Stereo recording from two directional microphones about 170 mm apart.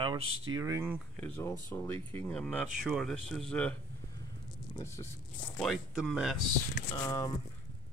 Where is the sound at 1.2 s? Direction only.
15° left (ahead or behind).